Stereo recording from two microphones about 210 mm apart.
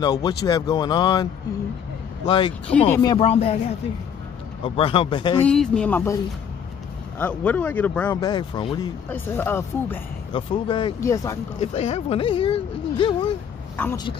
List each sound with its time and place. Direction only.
0.0 s a man's voice: 20° left (ahead or behind)
4.6 s a man's voice: 25° left (ahead or behind)
5.5 s speech: 5° left (ahead or behind)
7.2 s speech: 10° left (ahead or behind)
8.2 s a man's voice: 20° left (ahead or behind)
10.3 s a man's voice: 25° left (ahead or behind)
11.6 s speech: 30° left (ahead or behind)
13.7 s speech: 10° left (ahead or behind)